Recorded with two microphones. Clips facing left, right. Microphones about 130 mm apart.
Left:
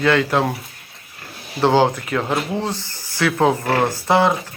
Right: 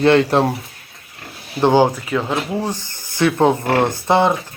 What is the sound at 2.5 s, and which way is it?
Speech, 15° right (ahead or behind).